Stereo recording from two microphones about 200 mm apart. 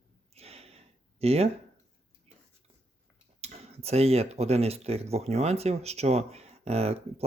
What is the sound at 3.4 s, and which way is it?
Speech, 30° right (ahead or behind).